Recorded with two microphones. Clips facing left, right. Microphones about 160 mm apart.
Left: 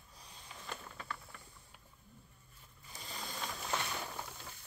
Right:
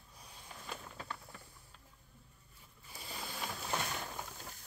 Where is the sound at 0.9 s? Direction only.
25° right (ahead or behind).